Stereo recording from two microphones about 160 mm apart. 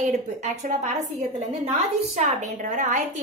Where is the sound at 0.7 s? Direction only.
50° right (ahead or behind).